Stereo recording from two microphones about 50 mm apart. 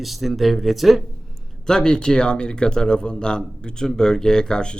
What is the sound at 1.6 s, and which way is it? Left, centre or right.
A man's voice, centre.